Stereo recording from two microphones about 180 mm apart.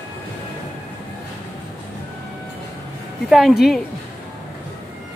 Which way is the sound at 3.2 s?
Centre (ahead or behind).